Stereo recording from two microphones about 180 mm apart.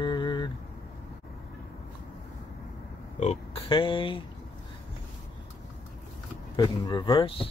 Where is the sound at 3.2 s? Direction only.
35° left (ahead or behind).